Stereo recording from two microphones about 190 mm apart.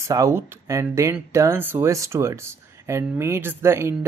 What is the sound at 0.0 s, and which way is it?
Speech, 15° right (ahead or behind).